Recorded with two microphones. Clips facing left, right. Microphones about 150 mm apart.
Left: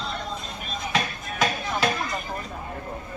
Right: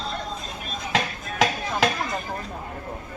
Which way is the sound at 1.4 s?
90° right.